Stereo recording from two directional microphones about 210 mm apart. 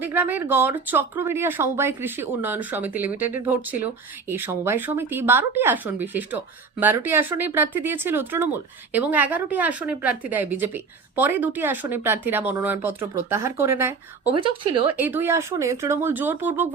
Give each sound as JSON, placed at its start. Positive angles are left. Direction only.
{"t": 0.0, "sound": "speech", "side_deg": -10}
{"t": 14.3, "sound": "speech", "side_deg": -25}
{"t": 14.9, "sound": "speech", "side_deg": -10}